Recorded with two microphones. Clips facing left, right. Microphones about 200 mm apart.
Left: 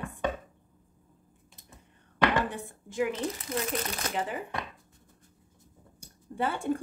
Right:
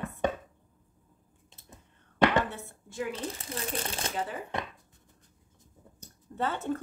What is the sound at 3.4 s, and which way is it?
Speech, 30° right (ahead or behind).